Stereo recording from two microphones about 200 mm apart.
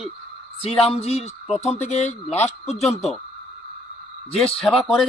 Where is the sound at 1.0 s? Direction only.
30° left (ahead or behind).